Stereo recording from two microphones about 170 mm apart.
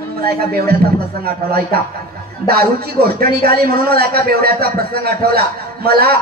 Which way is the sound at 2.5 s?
65° right (ahead or behind).